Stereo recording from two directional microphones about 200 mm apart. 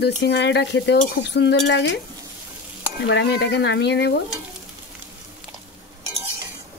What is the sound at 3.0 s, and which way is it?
Speech, 55° left (ahead or behind).